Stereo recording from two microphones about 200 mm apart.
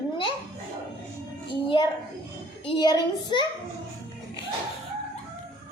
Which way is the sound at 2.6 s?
20° left (ahead or behind).